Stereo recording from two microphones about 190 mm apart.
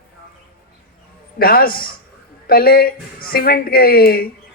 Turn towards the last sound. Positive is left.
turn(degrees=55)  # may be behind; listen again after turning